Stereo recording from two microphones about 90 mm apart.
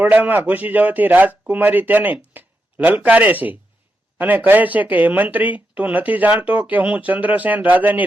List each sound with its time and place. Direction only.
0.0 s a man's voice: 20° right (ahead or behind)